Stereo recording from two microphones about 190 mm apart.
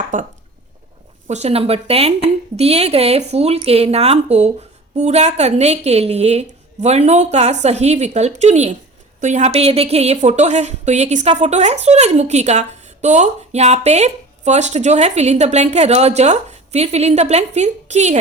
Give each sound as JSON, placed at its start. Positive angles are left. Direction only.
{"t": 0.1, "sound": "speech", "side_deg": -40}
{"t": 1.3, "sound": "a woman's voice", "side_deg": -35}